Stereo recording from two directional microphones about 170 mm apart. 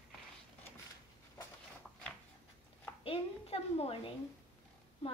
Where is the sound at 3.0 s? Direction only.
35° left (ahead or behind).